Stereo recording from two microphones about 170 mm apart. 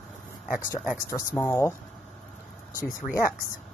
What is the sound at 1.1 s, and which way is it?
Speech, 15° left (ahead or behind).